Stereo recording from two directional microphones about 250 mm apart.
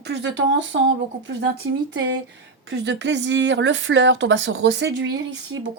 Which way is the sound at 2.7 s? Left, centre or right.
Right.